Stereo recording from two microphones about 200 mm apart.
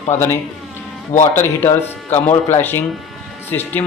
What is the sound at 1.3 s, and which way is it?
Speech, 10° left (ahead or behind).